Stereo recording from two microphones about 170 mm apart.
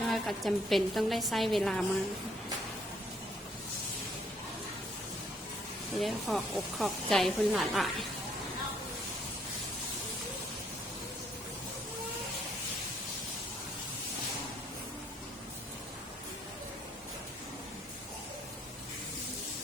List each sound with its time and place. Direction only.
0.0 s speech: centre (ahead or behind)
5.9 s speech: centre (ahead or behind)